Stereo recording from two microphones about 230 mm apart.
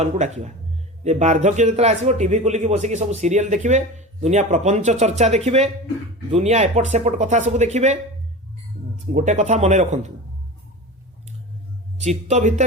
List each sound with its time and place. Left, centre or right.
0.0 s a man's voice: right
9.0 s speech: right
11.9 s speech: right